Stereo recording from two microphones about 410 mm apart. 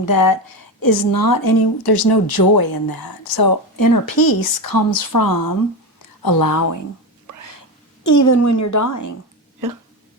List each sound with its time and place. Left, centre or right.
0.1 s a woman's voice: left
8.0 s a woman's voice: left